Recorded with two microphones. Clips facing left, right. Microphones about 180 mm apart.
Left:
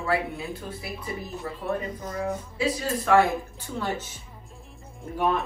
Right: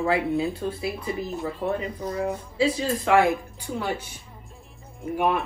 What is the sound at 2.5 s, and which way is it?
Speech, 30° right (ahead or behind).